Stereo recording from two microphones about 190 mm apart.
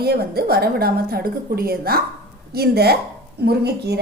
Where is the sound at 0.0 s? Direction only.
55° right (ahead or behind).